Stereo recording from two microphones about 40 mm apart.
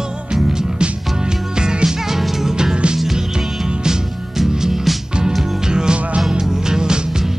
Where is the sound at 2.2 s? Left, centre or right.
Centre.